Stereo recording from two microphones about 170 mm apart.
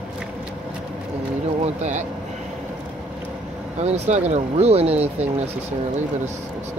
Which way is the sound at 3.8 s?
40° right (ahead or behind).